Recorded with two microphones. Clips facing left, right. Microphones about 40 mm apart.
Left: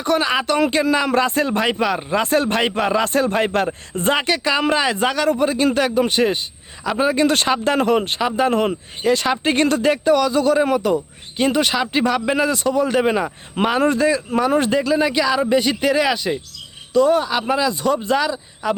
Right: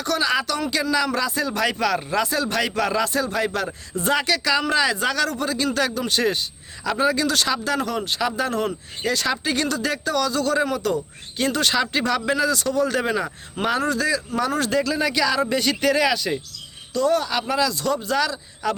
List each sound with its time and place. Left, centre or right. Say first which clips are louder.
0.0 s speech: left 3 dB; left
1.6 s speech: left 2 dB; left
2.2 s speech: left 5 dB; left
3.0 s speech: left 4 dB; left
4.1 s speech: left 2 dB; left
7.3 s speech: left 4 dB; left
9.9 s speech: left 7 dB; left
12.4 s speech: left 3 dB; left
13.7 s a man's voice: left 6 dB; left; by 18.7 s centre